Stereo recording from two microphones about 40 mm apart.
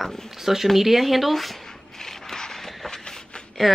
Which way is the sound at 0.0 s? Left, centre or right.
Centre.